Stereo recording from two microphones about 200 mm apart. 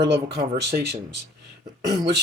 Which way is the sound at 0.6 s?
55° right (ahead or behind).